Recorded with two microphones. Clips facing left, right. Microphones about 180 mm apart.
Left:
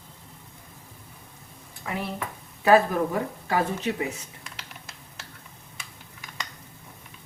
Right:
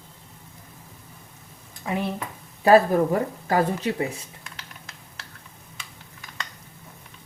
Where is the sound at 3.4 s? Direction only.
40° right (ahead or behind).